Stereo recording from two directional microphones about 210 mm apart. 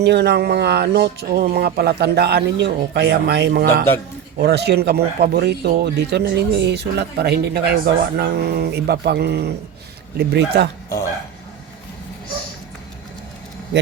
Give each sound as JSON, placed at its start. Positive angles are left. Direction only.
{"t": 0.0, "sound": "speech", "side_deg": -55}